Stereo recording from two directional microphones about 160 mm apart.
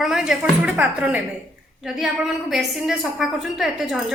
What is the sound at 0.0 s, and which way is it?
A woman's voice, 5° right (ahead or behind).